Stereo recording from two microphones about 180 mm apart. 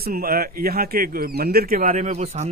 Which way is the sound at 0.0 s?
55° right (ahead or behind).